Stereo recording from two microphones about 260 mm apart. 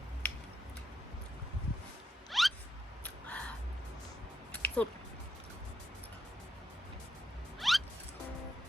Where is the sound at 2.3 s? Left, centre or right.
Centre.